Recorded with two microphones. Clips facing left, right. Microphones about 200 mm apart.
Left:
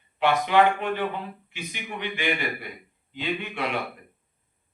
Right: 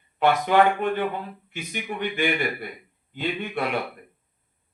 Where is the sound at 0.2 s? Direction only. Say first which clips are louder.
Right 1 dB; 45° right (ahead or behind).